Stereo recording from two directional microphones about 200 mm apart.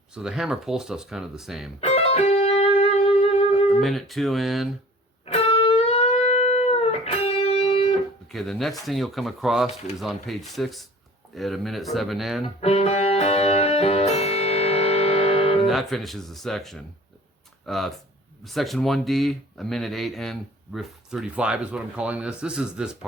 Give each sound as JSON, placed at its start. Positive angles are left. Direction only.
{"t": 0.1, "sound": "speech", "side_deg": -5}
{"t": 1.8, "sound": "music", "side_deg": 30}
{"t": 3.7, "sound": "speech", "side_deg": 0}
{"t": 5.2, "sound": "music", "side_deg": 30}
{"t": 8.3, "sound": "speech", "side_deg": 0}
{"t": 12.5, "sound": "music", "side_deg": 30}
{"t": 15.6, "sound": "speech", "side_deg": 0}